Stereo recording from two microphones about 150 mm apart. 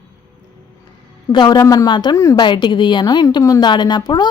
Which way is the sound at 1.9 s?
30° left (ahead or behind).